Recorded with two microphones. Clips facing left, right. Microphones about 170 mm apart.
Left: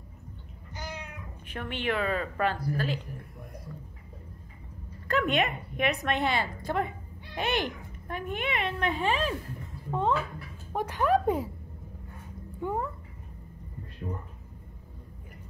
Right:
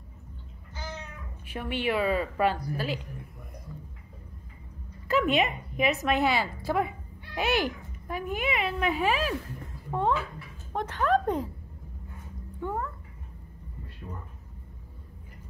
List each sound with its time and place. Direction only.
0.7 s cat: 15° left (ahead or behind)
1.5 s speech: 10° right (ahead or behind)
5.0 s speech: 5° right (ahead or behind)
9.8 s a sound: centre (ahead or behind)
10.7 s a woman's voice: 10° left (ahead or behind)
12.5 s cat: 15° left (ahead or behind)